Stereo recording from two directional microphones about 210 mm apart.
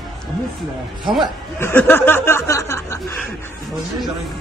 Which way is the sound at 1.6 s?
10° left (ahead or behind).